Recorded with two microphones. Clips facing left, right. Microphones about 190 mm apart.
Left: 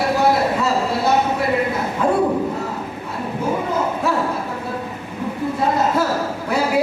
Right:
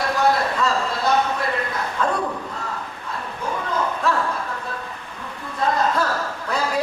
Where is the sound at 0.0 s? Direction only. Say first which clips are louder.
Left 3 dB; 10° left (ahead or behind).